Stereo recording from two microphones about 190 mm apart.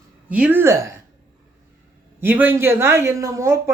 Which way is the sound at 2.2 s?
10° right (ahead or behind).